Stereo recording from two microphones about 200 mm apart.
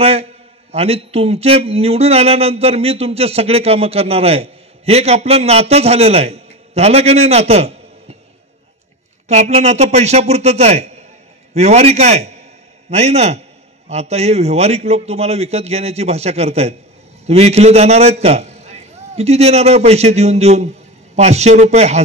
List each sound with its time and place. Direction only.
0.0 s a man's voice: 30° right (ahead or behind)
9.3 s a man's voice: 35° right (ahead or behind)